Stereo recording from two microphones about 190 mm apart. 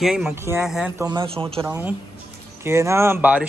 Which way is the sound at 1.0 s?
25° right (ahead or behind).